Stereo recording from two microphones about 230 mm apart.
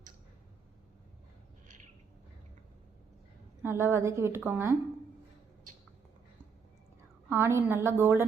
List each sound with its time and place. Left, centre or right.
3.6 s a woman's voice: centre
7.3 s a woman's voice: centre